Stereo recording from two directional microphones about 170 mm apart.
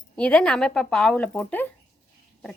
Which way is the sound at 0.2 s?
5° left (ahead or behind).